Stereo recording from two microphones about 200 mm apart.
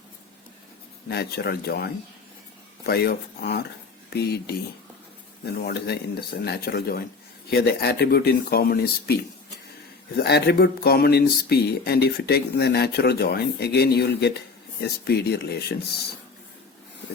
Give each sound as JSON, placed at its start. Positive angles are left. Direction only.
{"t": 1.0, "sound": "speech", "side_deg": 55}
{"t": 5.6, "sound": "speech", "side_deg": 55}
{"t": 10.2, "sound": "speech", "side_deg": 55}